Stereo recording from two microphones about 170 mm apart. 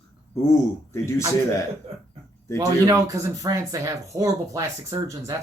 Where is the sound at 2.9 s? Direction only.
20° right (ahead or behind).